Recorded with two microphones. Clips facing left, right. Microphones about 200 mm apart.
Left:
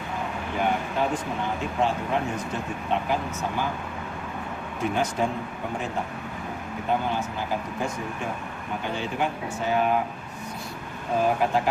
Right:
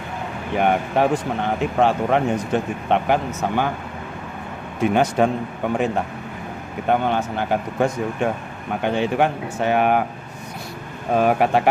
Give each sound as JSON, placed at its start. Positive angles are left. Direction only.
{"t": 0.6, "sound": "speech", "side_deg": -65}
{"t": 4.8, "sound": "speech", "side_deg": -70}
{"t": 11.1, "sound": "speech", "side_deg": -70}